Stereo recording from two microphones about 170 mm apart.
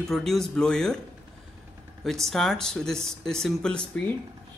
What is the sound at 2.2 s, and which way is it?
A man's voice, centre (ahead or behind).